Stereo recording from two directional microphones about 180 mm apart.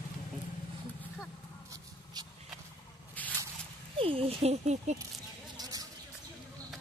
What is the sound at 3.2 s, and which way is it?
Squish, 10° left (ahead or behind).